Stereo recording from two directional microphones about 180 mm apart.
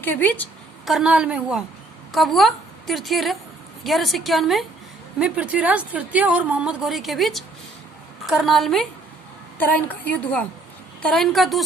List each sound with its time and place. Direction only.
0.0 s a woman's voice: 10° left (ahead or behind)
0.9 s a woman's voice: 5° right (ahead or behind)